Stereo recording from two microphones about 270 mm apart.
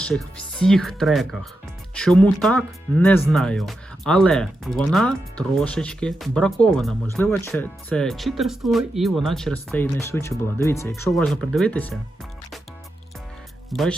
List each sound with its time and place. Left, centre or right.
0.0 s speech: centre
13.7 s speech: centre